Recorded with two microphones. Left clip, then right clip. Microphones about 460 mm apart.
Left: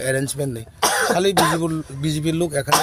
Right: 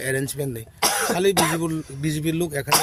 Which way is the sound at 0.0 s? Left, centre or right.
Right.